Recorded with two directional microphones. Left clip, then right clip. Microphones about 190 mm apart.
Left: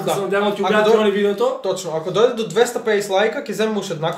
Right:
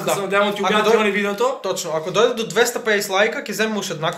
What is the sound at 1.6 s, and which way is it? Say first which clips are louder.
Speech: left 1 dB; 5° right (ahead or behind).